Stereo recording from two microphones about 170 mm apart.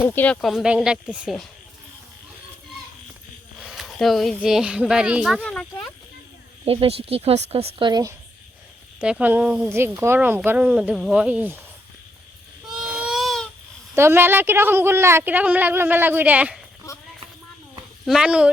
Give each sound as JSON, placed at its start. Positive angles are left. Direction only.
{"t": 0.0, "sound": "speech", "side_deg": 10}
{"t": 3.6, "sound": "a child's voice", "side_deg": 0}
{"t": 6.7, "sound": "speech", "side_deg": -35}
{"t": 9.0, "sound": "a woman's voice", "side_deg": -5}
{"t": 12.6, "sound": "baby cry", "side_deg": -5}
{"t": 13.9, "sound": "a woman's voice", "side_deg": -15}
{"t": 18.0, "sound": "speech", "side_deg": -5}